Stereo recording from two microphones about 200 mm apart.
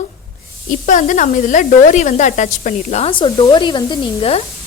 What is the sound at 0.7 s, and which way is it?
Speech, 40° left (ahead or behind).